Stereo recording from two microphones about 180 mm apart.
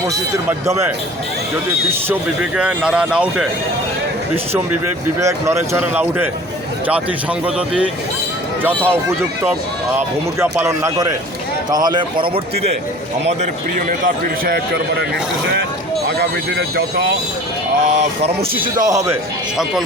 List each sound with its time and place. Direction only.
2.6 s speech: 5° right (ahead or behind)
5.2 s speech: 15° right (ahead or behind)
7.4 s speech: 5° right (ahead or behind)
10.4 s speech: 15° right (ahead or behind)
13.2 s a man's voice: 40° right (ahead or behind)
18.2 s speech: 30° right (ahead or behind)
18.9 s speech: 20° right (ahead or behind)